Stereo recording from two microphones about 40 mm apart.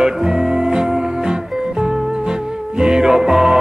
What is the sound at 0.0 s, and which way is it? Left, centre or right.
Music, centre.